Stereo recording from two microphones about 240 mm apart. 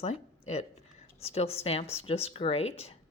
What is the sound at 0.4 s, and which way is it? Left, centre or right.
Speech, left.